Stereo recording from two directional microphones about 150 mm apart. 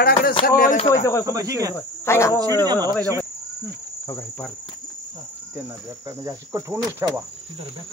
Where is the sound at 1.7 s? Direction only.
20° left (ahead or behind).